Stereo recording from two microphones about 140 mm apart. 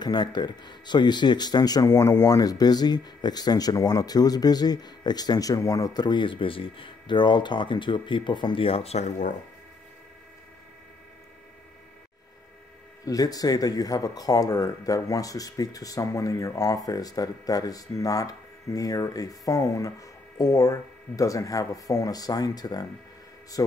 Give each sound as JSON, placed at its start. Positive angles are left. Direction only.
{"t": 0.0, "sound": "speech", "side_deg": 30}
{"t": 13.0, "sound": "speech", "side_deg": 25}